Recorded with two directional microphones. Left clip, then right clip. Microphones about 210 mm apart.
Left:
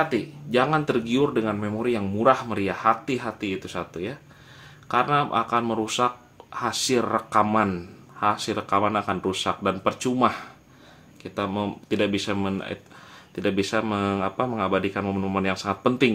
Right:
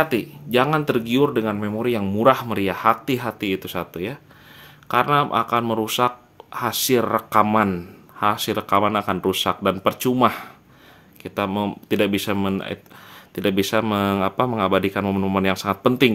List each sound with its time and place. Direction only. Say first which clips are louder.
0.0 s speech: right 3 dB; 40° right (ahead or behind)